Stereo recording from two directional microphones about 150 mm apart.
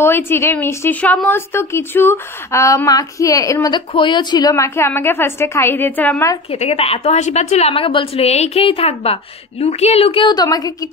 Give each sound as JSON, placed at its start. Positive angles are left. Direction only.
{"t": 0.0, "sound": "a woman's voice", "side_deg": 15}
{"t": 6.5, "sound": "a woman's voice", "side_deg": 40}